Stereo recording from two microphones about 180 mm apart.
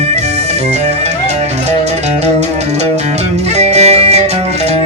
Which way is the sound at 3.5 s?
35° right (ahead or behind).